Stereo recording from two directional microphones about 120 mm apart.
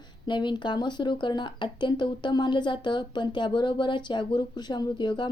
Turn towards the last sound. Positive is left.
turn(degrees=40)  # may be behind; listen again after turning